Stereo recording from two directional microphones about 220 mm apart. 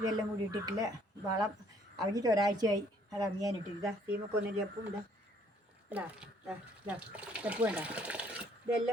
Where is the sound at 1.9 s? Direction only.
15° right (ahead or behind).